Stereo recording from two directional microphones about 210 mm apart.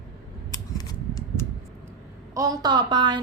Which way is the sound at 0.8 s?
15° left (ahead or behind).